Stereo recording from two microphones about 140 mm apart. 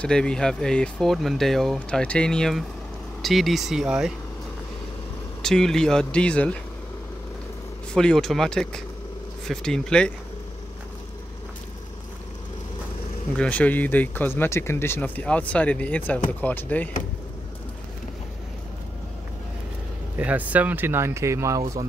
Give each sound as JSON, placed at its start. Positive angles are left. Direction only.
{"t": 0.0, "sound": "speech", "side_deg": 5}
{"t": 5.4, "sound": "speech", "side_deg": 5}
{"t": 7.9, "sound": "speech", "side_deg": 5}
{"t": 13.4, "sound": "speech", "side_deg": 10}
{"t": 20.2, "sound": "speech", "side_deg": -10}